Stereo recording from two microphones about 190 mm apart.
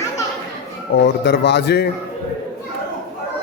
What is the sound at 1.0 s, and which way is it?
Speech, 65° left (ahead or behind).